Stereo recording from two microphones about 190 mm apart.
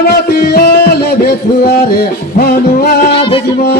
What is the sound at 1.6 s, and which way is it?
Music, 55° left (ahead or behind).